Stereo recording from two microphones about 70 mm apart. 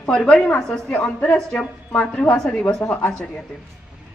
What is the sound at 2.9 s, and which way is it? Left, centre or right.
Speech, left.